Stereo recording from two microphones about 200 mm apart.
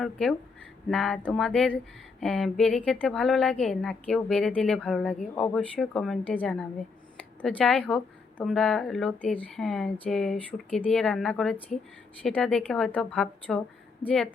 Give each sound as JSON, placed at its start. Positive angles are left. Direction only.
{"t": 0.0, "sound": "a woman's voice", "side_deg": 0}